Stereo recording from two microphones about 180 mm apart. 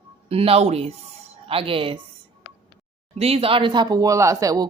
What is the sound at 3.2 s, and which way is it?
Speech, 35° right (ahead or behind).